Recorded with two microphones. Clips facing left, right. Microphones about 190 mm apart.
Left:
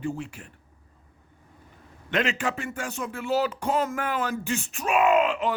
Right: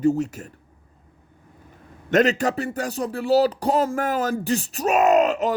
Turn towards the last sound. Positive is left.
turn(degrees=-40)  # may be behind; listen again after turning